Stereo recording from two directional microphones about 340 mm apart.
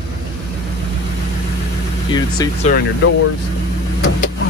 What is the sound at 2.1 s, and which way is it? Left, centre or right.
Speech, centre.